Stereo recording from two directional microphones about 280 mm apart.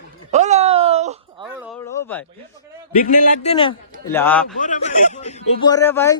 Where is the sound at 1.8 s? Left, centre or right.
Centre.